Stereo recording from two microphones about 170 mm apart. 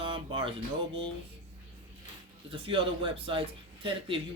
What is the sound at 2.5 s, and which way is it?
Speech, 30° right (ahead or behind).